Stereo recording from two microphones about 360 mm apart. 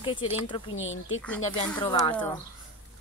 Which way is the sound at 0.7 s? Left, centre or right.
Left.